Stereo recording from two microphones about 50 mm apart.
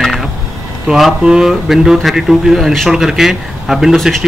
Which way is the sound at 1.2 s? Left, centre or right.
Centre.